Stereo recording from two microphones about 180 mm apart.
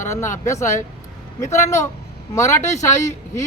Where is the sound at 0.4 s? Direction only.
15° left (ahead or behind).